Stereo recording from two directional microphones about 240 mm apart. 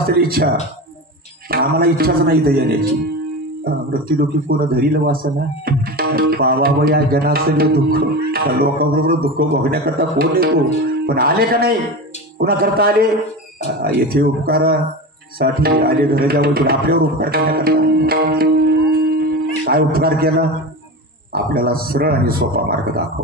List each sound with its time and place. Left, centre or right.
0.1 s a man's voice: right